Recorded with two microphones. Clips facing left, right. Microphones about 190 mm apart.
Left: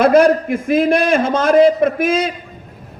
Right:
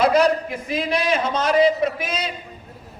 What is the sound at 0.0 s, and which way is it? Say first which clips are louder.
A man's voice: left 6 dB; 50° left (ahead or behind).